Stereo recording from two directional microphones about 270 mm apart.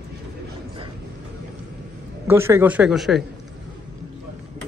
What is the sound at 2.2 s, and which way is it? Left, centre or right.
A man's voice, centre.